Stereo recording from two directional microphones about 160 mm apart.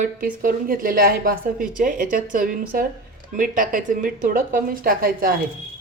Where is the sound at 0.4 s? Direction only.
60° right (ahead or behind).